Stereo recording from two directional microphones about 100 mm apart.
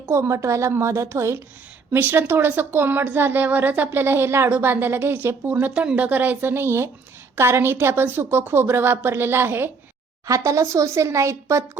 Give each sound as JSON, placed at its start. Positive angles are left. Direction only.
{"t": 0.0, "sound": "a woman's voice", "side_deg": -25}